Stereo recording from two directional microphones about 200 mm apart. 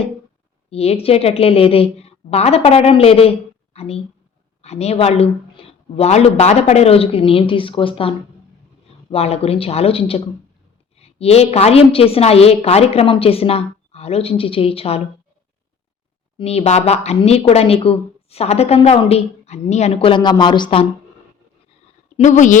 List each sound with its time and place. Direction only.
0.7 s a woman's voice: 30° left (ahead or behind)
16.4 s speech: 30° left (ahead or behind)
22.2 s speech: 40° left (ahead or behind)